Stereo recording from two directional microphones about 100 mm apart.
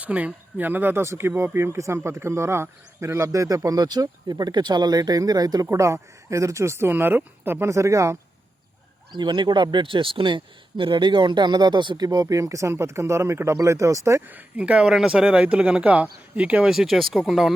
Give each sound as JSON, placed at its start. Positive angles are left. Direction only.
{"t": 0.0, "sound": "a man's voice", "side_deg": -15}
{"t": 9.1, "sound": "speech", "side_deg": -50}
{"t": 14.3, "sound": "speech", "side_deg": -15}